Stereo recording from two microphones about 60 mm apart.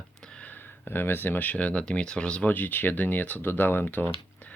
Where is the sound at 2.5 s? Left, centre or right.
Left.